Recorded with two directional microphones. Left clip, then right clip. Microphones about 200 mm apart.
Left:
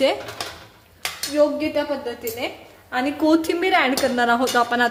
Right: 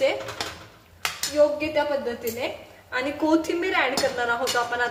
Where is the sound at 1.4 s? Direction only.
35° left (ahead or behind).